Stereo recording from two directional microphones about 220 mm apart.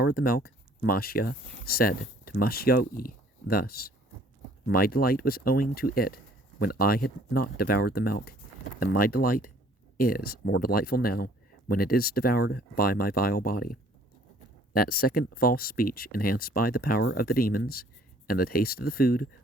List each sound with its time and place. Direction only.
0.0 s speech: 45° left (ahead or behind)